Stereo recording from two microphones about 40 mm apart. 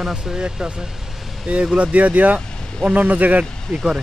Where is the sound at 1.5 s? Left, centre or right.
Right.